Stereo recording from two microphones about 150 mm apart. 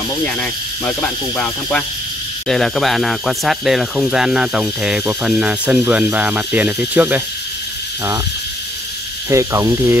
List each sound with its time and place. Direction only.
0.2 s speech: 5° left (ahead or behind); by 7.2 s 10° right (ahead or behind)
9.3 s speech: 20° right (ahead or behind)